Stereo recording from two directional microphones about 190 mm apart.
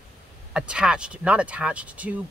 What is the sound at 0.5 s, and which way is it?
Speech, 5° right (ahead or behind).